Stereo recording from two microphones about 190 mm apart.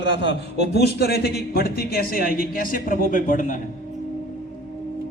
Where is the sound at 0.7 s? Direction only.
55° left (ahead or behind).